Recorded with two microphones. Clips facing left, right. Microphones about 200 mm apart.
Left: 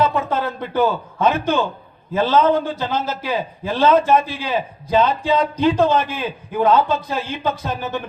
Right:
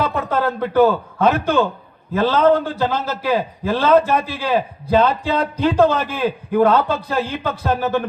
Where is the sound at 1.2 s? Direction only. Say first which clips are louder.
Right 2 dB; 60° right (ahead or behind).